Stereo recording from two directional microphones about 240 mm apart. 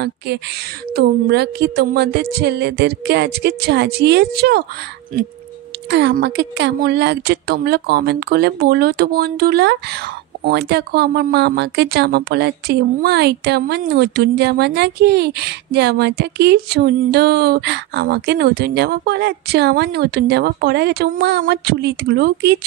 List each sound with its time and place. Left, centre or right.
0.9 s speech: right
5.9 s speech: right